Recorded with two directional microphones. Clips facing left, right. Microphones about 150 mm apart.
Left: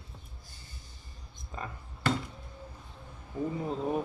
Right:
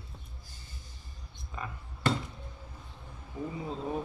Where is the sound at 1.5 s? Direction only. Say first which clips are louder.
Even; 35° left (ahead or behind).